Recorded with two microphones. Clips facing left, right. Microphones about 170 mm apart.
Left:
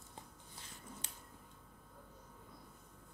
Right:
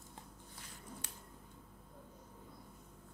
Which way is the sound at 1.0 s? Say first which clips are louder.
Right 1 dB; 20° left (ahead or behind).